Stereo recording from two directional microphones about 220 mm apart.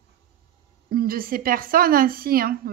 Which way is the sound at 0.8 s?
40° right (ahead or behind).